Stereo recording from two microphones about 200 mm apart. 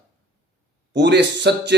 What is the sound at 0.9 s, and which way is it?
Speech, 60° right (ahead or behind).